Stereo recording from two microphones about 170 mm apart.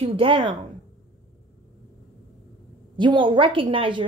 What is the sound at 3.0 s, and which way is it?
A woman's voice, 30° right (ahead or behind).